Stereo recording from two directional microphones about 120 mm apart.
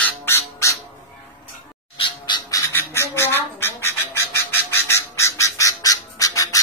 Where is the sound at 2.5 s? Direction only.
20° left (ahead or behind).